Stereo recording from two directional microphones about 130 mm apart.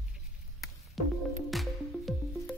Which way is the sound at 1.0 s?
Centre (ahead or behind).